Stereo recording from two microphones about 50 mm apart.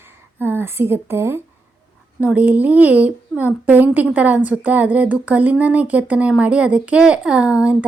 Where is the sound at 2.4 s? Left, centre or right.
Right.